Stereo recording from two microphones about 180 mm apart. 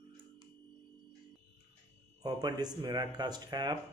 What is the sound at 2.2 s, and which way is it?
Speech, 20° right (ahead or behind).